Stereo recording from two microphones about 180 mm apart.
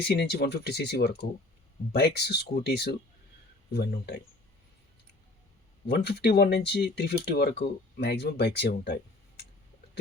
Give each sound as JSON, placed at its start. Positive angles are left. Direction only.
{"t": 0.1, "sound": "speech", "side_deg": 65}
{"t": 5.9, "sound": "speech", "side_deg": 65}